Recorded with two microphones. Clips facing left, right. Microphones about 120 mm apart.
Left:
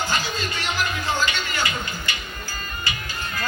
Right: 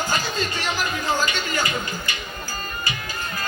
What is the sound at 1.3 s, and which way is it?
Speech, 40° right (ahead or behind).